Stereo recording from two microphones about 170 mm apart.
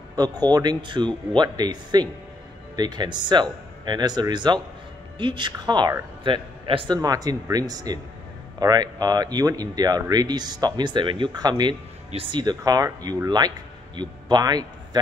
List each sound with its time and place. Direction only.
0.1 s speech: 25° right (ahead or behind)